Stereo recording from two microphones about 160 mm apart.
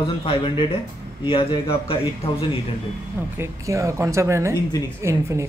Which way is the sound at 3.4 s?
20° right (ahead or behind).